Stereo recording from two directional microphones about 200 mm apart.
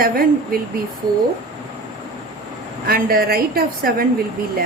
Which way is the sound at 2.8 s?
50° right (ahead or behind).